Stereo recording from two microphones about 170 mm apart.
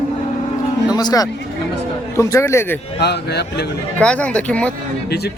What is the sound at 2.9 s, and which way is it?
Speech, 75° left (ahead or behind).